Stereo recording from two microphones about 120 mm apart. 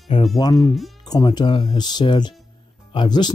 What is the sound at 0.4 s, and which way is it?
Speech, 35° left (ahead or behind).